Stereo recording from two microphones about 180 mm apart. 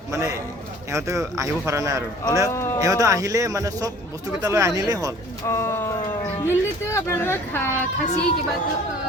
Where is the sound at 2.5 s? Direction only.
15° left (ahead or behind).